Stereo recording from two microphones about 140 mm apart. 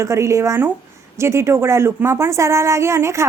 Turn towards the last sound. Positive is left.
turn(degrees=-20)  # may be behind; listen again after turning